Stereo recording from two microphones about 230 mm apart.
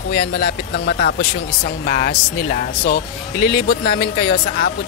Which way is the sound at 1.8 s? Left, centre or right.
Left.